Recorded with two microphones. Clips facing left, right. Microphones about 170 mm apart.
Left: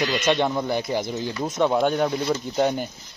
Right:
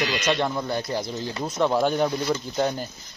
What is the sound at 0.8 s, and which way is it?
Speech, 20° left (ahead or behind).